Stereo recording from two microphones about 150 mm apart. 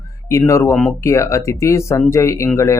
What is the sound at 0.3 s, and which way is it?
Speech, 20° left (ahead or behind).